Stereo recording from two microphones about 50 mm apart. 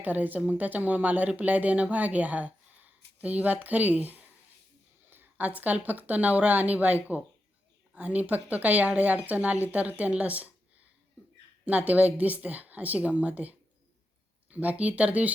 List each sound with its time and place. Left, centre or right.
0.0 s a woman's voice: right
5.4 s a woman's voice: right
11.6 s a woman's voice: right